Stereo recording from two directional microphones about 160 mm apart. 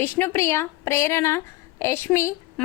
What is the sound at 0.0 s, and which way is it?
A woman's voice, 15° left (ahead or behind).